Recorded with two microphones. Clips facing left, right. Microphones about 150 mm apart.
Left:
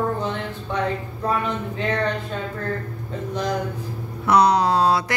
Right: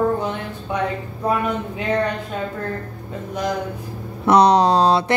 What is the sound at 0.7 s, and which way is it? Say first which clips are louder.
Speech: right 2 dB; 10° right (ahead or behind).